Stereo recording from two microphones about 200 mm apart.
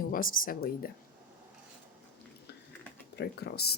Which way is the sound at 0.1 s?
45° left (ahead or behind).